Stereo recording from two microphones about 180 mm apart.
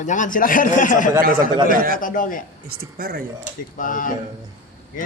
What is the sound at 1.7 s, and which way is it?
Speech, 50° right (ahead or behind).